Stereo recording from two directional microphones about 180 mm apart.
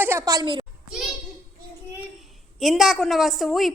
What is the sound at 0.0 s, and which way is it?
Speech, 15° right (ahead or behind).